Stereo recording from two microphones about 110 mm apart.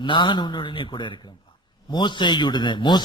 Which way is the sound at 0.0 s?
45° left (ahead or behind).